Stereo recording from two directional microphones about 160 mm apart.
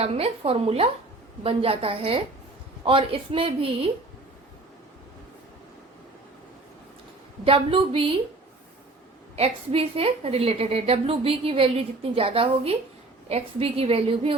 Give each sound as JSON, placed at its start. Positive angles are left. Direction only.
{"t": 0.0, "sound": "a woman's voice", "side_deg": -35}
{"t": 7.4, "sound": "a woman's voice", "side_deg": -35}
{"t": 9.3, "sound": "a woman's voice", "side_deg": -40}